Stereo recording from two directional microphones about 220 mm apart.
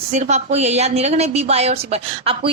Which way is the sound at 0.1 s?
30° right (ahead or behind).